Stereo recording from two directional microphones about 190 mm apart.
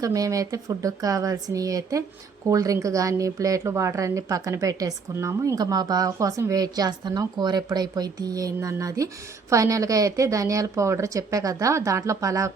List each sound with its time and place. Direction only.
0.0 s a woman's voice: 20° right (ahead or behind)